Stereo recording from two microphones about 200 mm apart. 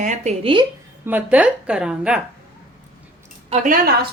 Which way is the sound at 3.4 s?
40° right (ahead or behind).